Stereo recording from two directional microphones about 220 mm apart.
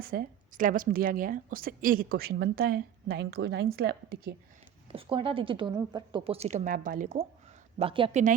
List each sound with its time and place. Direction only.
0.0 s a woman's voice: 40° right (ahead or behind)
4.9 s a woman's voice: 25° right (ahead or behind)
7.8 s a woman's voice: 25° right (ahead or behind)